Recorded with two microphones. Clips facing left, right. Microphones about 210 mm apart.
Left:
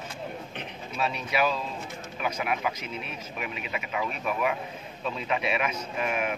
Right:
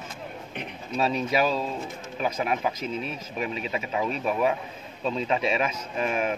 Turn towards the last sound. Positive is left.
turn(degrees=-30)  # may be behind; listen again after turning